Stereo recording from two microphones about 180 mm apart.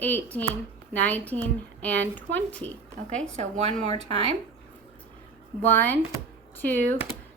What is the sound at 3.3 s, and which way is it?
Speech, 35° right (ahead or behind).